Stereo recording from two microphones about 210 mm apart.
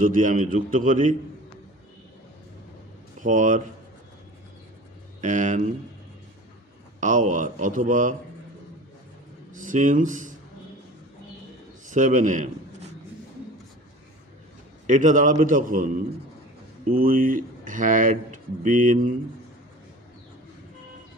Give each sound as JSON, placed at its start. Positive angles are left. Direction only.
{"t": 0.0, "sound": "speech", "side_deg": -40}
{"t": 3.2, "sound": "speech", "side_deg": -35}
{"t": 5.2, "sound": "speech", "side_deg": -35}
{"t": 7.0, "sound": "speech", "side_deg": -35}
{"t": 9.6, "sound": "speech", "side_deg": -40}
{"t": 11.9, "sound": "a man's voice", "side_deg": -35}
{"t": 14.9, "sound": "speech", "side_deg": -35}